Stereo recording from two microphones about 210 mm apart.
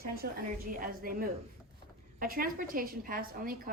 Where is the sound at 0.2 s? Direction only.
45° right (ahead or behind).